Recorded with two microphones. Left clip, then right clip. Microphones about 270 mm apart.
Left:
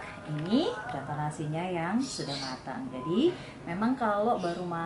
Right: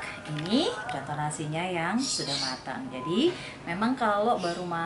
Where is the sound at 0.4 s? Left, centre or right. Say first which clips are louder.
Right 2 dB; centre.